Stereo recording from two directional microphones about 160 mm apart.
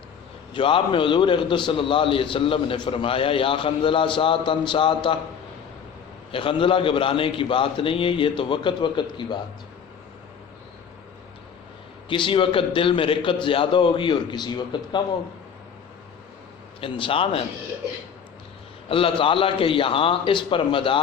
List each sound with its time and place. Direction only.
0.5 s a man's voice: 30° left (ahead or behind)
6.3 s a man's voice: 35° left (ahead or behind)
12.0 s a man's voice: 30° left (ahead or behind)
16.8 s a man's voice: 35° left (ahead or behind)
18.9 s a man's voice: 35° left (ahead or behind)